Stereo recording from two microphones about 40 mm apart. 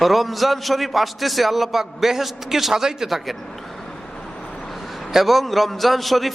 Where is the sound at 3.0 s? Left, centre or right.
Centre.